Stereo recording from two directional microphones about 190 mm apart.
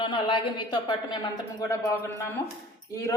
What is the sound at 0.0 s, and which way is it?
Speech, 25° left (ahead or behind).